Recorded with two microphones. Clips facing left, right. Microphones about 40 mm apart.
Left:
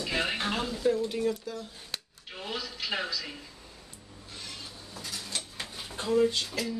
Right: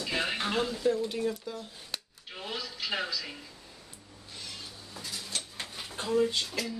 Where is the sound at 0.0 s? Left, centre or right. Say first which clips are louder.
Left 1 dB; centre.